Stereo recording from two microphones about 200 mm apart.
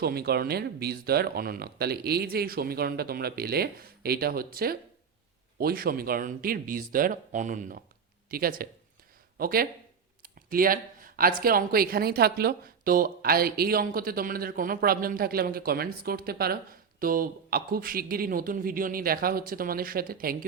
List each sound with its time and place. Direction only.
0.0 s speech: 50° right (ahead or behind)